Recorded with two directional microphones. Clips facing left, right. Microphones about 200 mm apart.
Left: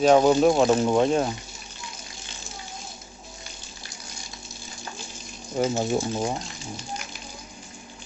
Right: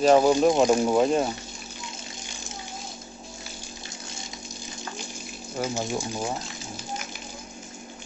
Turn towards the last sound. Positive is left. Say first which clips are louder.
# left 3 dB
turn(degrees=0)  # may be behind; listen again after turning